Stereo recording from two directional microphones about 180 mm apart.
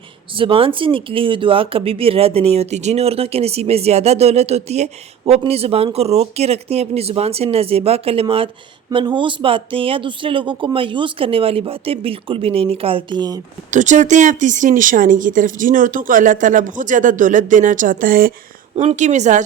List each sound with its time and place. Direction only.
0.3 s speech: 30° right (ahead or behind)
13.7 s a woman's voice: 40° right (ahead or behind)
18.8 s speech: 40° right (ahead or behind)